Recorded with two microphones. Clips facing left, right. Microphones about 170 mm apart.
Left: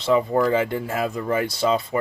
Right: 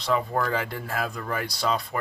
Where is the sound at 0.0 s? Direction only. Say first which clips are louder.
Left 6 dB; 25° left (ahead or behind).